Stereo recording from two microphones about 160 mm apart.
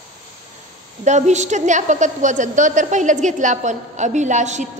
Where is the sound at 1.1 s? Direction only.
45° right (ahead or behind).